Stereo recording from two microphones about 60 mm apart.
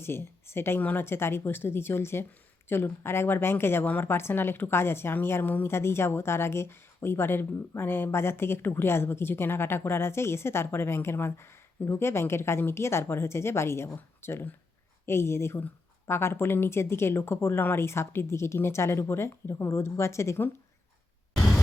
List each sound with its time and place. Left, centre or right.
0.0 s a woman's voice: left
0.8 s a woman's voice: left
1.0 s speech: left
5.6 s speech: left